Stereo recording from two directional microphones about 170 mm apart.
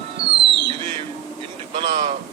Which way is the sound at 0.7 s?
30° right (ahead or behind).